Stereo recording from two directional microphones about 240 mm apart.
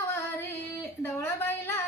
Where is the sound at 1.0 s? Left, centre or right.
Centre.